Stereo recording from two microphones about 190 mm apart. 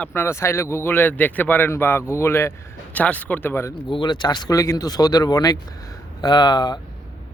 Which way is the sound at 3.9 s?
25° left (ahead or behind).